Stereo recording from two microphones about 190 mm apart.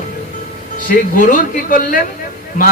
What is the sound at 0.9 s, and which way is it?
A man's voice, 45° left (ahead or behind).